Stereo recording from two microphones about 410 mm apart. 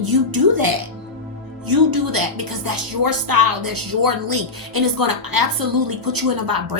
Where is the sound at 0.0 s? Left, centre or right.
Right.